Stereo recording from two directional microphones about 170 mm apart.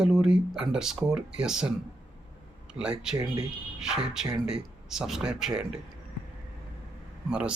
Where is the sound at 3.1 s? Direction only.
20° right (ahead or behind).